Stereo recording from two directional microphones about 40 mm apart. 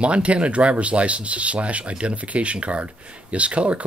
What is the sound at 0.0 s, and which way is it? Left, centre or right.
Speech, right.